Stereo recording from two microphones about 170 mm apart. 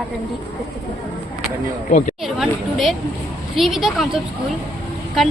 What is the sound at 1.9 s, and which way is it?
Speech, 45° left (ahead or behind).